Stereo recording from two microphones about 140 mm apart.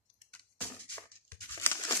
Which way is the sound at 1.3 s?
15° left (ahead or behind).